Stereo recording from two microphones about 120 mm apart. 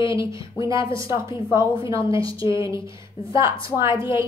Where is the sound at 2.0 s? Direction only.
45° left (ahead or behind).